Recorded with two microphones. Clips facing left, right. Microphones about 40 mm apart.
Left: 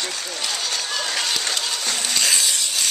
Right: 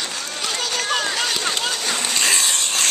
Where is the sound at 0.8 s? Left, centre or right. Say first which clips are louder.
Right 5 dB; right.